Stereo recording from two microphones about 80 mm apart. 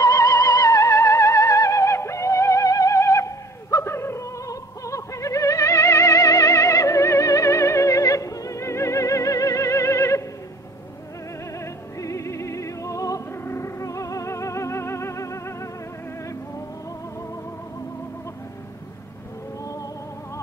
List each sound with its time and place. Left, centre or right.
0.0 s music: left
11.6 s music: left
13.3 s music: left